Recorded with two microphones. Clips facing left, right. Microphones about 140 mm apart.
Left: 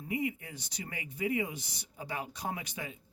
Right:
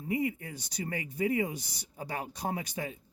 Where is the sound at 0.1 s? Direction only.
35° right (ahead or behind).